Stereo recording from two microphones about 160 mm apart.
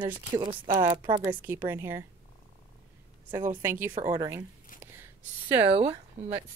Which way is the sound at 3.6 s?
15° right (ahead or behind).